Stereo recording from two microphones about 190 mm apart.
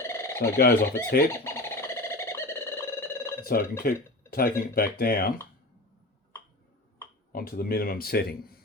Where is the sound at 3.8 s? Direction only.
55° left (ahead or behind).